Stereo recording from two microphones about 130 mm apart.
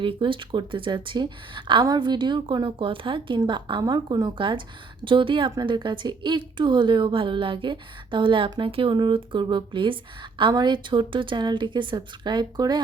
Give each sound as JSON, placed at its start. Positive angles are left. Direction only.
{"t": 0.0, "sound": "a woman's voice", "side_deg": -40}